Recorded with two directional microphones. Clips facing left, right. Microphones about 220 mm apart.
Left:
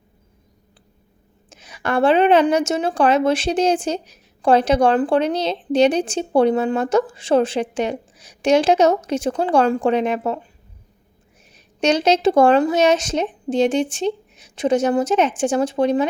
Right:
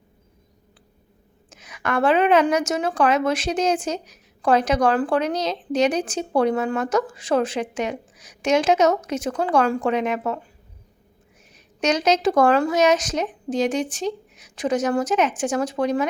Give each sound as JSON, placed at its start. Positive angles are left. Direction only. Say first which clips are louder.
{"t": 1.5, "sound": "a woman's voice", "louder": "left 3 dB", "side_deg": 30}
{"t": 11.5, "sound": "a woman's voice", "louder": "left 4 dB", "side_deg": 30}